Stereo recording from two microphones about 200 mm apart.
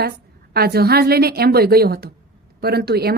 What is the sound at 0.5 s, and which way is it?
Speech, 50° right (ahead or behind).